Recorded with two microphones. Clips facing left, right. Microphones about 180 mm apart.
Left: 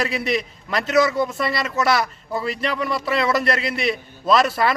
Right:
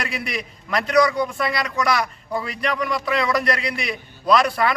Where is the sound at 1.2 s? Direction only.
25° left (ahead or behind).